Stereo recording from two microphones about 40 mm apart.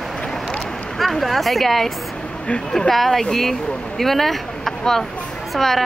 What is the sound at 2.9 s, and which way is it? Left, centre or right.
Speech, centre.